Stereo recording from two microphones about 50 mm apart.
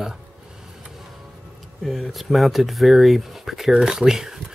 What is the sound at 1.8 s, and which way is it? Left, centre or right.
Speech, centre.